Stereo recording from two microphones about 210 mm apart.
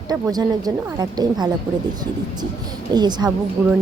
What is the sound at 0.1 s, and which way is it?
A woman's voice, 20° right (ahead or behind).